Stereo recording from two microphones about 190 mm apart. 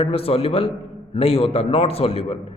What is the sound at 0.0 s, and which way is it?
A man's voice, 30° left (ahead or behind).